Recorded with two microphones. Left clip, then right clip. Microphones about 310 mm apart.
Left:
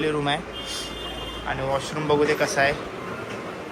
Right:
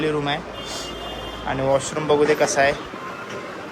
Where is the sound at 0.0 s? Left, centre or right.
Centre.